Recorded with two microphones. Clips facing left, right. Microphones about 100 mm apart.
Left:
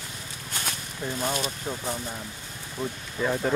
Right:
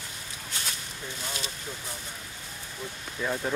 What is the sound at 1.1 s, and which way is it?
Speech, 50° left (ahead or behind).